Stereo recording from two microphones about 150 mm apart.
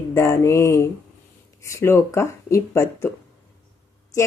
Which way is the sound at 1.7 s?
20° left (ahead or behind).